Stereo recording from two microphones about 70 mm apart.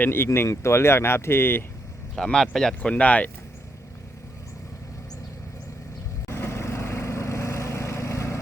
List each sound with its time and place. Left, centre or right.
0.0 s speech: left
0.3 s speech: left
2.1 s speech: centre
2.9 s speech: centre
6.2 s vehicle: left